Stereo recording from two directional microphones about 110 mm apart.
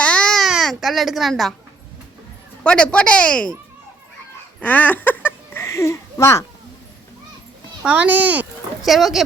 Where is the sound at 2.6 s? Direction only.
10° left (ahead or behind).